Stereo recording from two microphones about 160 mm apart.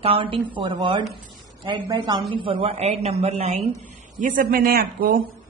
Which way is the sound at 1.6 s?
30° right (ahead or behind).